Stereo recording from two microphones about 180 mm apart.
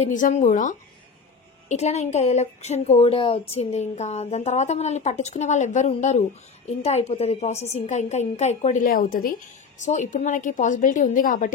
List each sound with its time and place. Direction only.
0.0 s a woman's voice: 45° left (ahead or behind)